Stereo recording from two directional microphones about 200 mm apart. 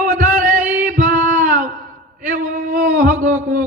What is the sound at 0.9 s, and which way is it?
Music, 45° right (ahead or behind).